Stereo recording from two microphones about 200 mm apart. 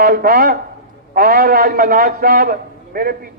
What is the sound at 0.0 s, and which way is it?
A man's voice, 50° right (ahead or behind).